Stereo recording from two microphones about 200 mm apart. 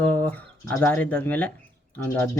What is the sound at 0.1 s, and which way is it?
Speech, 10° left (ahead or behind).